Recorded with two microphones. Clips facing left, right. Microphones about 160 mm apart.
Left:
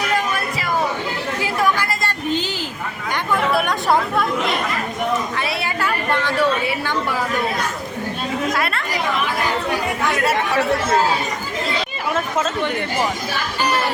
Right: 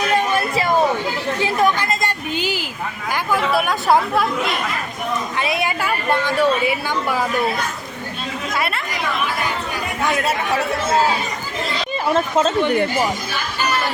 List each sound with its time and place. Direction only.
0.3 s chatter: 25° right (ahead or behind); by 2.6 s 10° right (ahead or behind)
3.1 s speech: 5° right (ahead or behind)
5.4 s a woman's voice: 15° right (ahead or behind)
8.5 s speech: 5° right (ahead or behind)
12.1 s speech: 30° right (ahead or behind)